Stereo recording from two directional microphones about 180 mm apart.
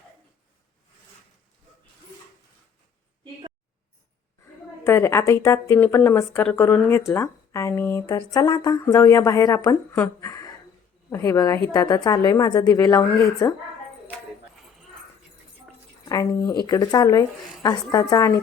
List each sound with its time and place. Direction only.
4.9 s a woman's voice: 15° left (ahead or behind)
16.0 s a woman's voice: 20° left (ahead or behind)